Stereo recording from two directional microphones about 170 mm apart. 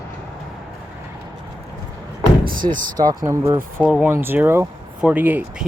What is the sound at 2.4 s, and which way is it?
Door, 55° right (ahead or behind).